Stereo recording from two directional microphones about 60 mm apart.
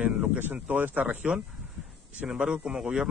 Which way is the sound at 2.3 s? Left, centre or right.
Centre.